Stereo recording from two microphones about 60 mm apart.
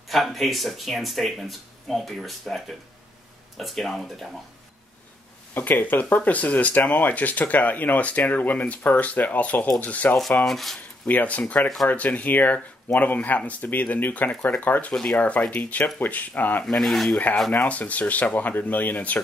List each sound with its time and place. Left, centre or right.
0.1 s speech: centre
5.5 s speech: left
10.4 s speech: centre
11.1 s speech: left
16.6 s speech: centre
17.5 s speech: left